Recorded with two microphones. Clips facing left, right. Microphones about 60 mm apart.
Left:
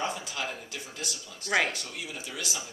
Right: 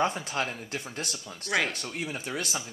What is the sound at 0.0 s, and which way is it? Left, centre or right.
Speech, right.